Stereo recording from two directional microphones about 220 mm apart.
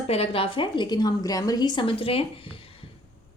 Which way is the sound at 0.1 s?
25° left (ahead or behind).